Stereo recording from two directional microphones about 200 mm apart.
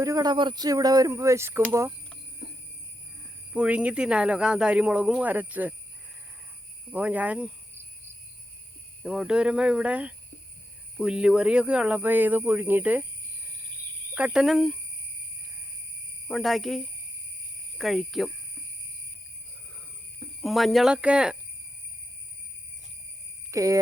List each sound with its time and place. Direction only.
0.0 s speech: 20° right (ahead or behind)
3.5 s speech: 5° right (ahead or behind)
6.9 s speech: 10° right (ahead or behind)
9.0 s speech: 5° right (ahead or behind)
14.2 s speech: 5° right (ahead or behind)
16.3 s speech: centre (ahead or behind)
20.4 s speech: centre (ahead or behind)
23.5 s speech: 15° right (ahead or behind)